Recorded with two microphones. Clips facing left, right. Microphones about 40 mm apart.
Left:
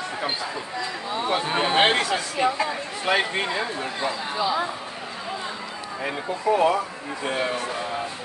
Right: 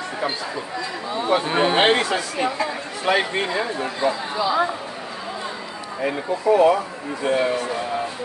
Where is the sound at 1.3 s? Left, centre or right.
Centre.